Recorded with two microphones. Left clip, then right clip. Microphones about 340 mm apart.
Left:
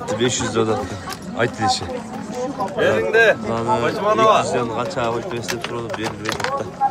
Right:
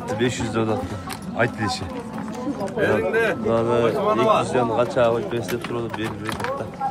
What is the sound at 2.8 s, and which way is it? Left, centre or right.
Speech, left.